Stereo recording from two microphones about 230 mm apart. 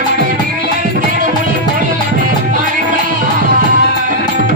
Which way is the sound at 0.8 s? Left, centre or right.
Right.